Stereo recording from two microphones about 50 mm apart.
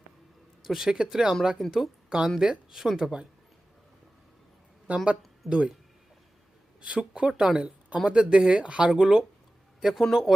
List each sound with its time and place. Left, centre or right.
0.7 s speech: centre
3.0 s speech: centre
4.9 s speech: right
6.8 s speech: centre